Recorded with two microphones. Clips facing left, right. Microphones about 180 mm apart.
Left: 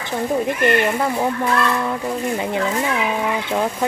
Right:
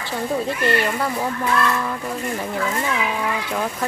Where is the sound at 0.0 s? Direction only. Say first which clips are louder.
Left 3 dB; 20° left (ahead or behind).